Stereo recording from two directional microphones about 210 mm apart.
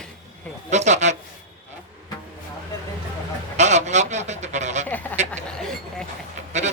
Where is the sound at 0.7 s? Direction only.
35° right (ahead or behind).